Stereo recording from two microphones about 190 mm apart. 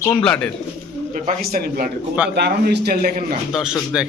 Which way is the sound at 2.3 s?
60° right (ahead or behind).